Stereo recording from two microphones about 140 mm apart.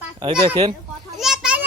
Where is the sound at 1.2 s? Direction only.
5° right (ahead or behind).